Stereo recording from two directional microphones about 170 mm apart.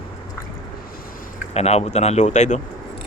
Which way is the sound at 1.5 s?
40° left (ahead or behind).